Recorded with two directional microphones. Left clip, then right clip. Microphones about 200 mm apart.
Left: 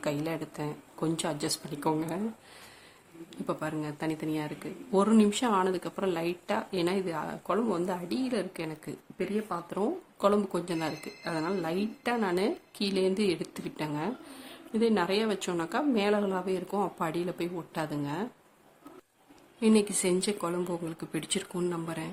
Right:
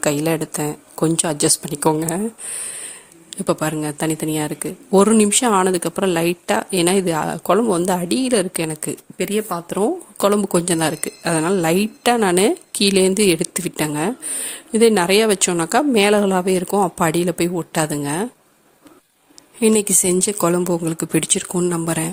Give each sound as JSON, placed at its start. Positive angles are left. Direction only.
{"t": 0.0, "sound": "speech", "side_deg": -45}
{"t": 3.2, "sound": "speech", "side_deg": -45}
{"t": 19.5, "sound": "speech", "side_deg": -45}